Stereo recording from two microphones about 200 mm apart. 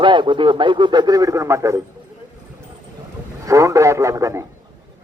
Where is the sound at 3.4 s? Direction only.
15° right (ahead or behind).